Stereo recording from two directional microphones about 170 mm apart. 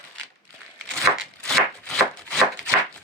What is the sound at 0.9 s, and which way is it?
Chopping, centre (ahead or behind).